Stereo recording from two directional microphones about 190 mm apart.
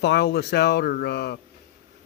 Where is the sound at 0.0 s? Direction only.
60° left (ahead or behind).